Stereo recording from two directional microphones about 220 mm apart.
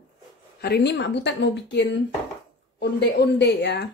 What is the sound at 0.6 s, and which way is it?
A woman's voice, 45° left (ahead or behind).